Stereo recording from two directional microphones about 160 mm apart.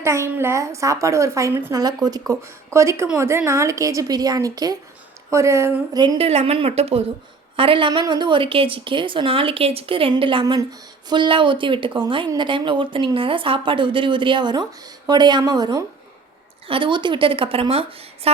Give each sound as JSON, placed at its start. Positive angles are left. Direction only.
{"t": 0.0, "sound": "a woman's voice", "side_deg": -15}
{"t": 6.1, "sound": "a woman's voice", "side_deg": -35}